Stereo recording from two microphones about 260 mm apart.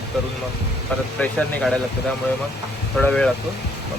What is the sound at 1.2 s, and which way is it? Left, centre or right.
Speech, centre.